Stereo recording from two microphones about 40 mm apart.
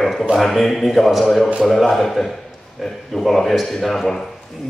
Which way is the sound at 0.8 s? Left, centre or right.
Centre.